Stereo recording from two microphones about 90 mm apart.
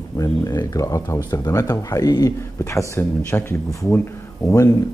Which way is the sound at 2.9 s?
25° left (ahead or behind).